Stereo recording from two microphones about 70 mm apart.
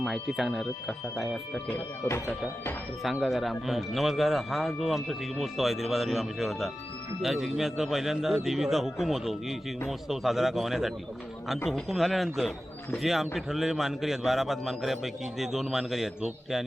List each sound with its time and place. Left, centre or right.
0.0 s speech: centre
2.0 s speech: left
3.0 s speech: centre